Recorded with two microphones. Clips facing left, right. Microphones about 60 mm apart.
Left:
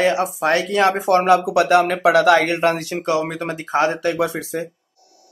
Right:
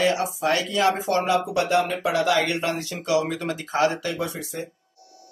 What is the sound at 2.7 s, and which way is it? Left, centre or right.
A man's voice, left.